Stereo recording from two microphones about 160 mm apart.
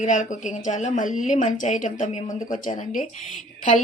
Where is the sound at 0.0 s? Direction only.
50° left (ahead or behind).